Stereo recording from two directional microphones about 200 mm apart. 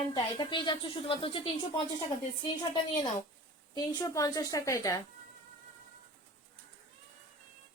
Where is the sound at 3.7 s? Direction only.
20° left (ahead or behind).